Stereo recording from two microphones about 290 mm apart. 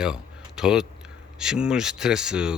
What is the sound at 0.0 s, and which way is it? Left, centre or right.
Speech, centre.